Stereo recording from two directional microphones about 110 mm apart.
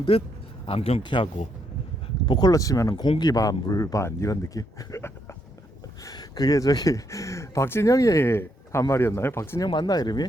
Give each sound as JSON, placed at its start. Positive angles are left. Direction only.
{"t": 0.1, "sound": "speech", "side_deg": 60}
{"t": 1.0, "sound": "speech", "side_deg": 50}
{"t": 9.6, "sound": "speech", "side_deg": 40}